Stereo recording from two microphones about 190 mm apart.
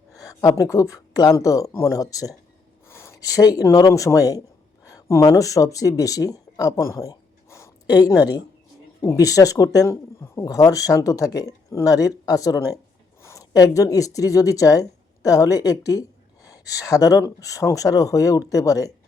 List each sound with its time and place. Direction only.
0.2 s speech: 15° left (ahead or behind)